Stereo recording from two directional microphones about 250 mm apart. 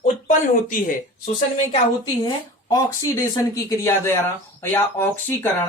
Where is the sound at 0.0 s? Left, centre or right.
Left.